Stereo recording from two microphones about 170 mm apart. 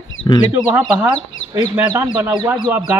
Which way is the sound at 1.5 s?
15° right (ahead or behind).